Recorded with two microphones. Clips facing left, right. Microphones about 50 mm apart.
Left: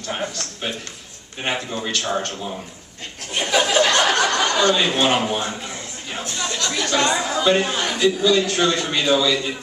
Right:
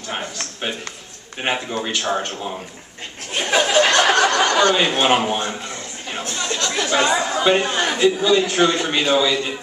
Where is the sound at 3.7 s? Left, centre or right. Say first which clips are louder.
Right 3 dB; right.